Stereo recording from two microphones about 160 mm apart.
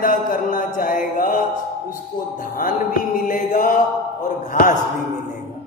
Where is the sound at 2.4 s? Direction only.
60° left (ahead or behind).